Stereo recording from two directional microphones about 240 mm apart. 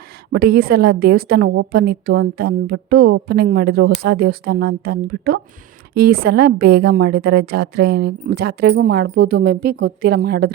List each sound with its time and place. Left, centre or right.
0.3 s a woman's voice: right